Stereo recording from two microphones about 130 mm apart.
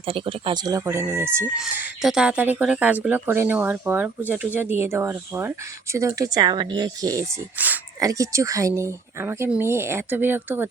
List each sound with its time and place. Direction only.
0.0 s speech: 45° right (ahead or behind); by 7.3 s 25° right (ahead or behind)
7.6 s speech: 15° right (ahead or behind)
7.9 s speech: 25° right (ahead or behind)